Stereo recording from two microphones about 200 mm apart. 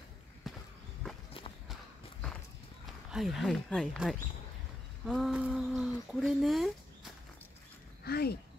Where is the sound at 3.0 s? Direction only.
Centre (ahead or behind).